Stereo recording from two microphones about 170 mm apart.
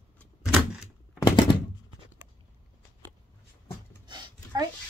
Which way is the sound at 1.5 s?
25° left (ahead or behind).